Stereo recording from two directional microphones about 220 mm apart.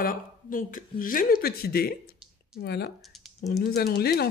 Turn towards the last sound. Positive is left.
turn(degrees=45)  # may be behind; listen again after turning